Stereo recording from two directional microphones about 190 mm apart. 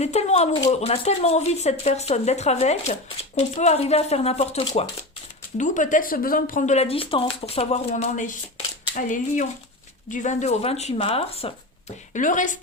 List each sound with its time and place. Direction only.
0.0 s a sound: 35° left (ahead or behind)
0.7 s speech: 35° left (ahead or behind)
12.1 s speech: 45° left (ahead or behind)